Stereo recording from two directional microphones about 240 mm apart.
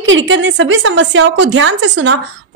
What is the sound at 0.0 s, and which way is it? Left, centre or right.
A woman's voice, right.